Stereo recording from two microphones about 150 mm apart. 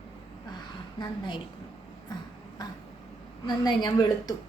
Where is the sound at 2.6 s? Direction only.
25° left (ahead or behind).